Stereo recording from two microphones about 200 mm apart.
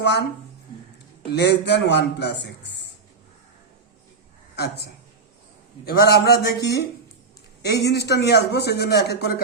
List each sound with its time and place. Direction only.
0.0 s a man's voice: 60° left (ahead or behind)
1.3 s a man's voice: 60° left (ahead or behind)
4.5 s a woman's voice: 55° left (ahead or behind)